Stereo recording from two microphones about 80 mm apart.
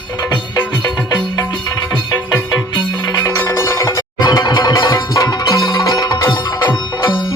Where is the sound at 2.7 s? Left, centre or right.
Left.